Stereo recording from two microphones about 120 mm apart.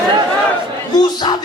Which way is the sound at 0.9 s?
35° left (ahead or behind).